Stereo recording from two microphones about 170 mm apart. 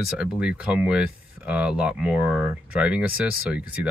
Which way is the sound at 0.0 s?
5° right (ahead or behind).